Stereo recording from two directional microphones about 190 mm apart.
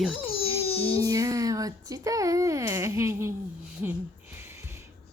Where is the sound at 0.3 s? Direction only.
30° left (ahead or behind).